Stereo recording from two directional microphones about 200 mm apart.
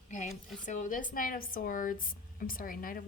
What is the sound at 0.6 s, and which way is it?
A woman's voice, 40° left (ahead or behind).